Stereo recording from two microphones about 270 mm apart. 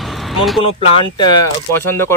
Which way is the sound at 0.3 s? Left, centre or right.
Centre.